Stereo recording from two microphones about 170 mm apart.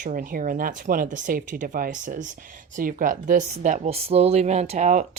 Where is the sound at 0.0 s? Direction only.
55° right (ahead or behind).